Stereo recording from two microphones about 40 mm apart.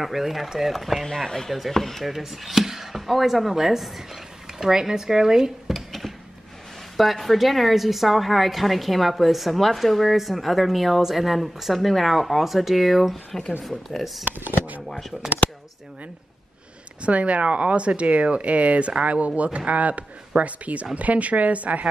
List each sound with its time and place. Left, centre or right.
0.0 s a woman's voice: centre
1.0 s speech: centre
5.7 s a sound: centre
7.0 s a woman's voice: centre
14.2 s speech: right
14.9 s a woman's voice: centre
17.0 s speech: right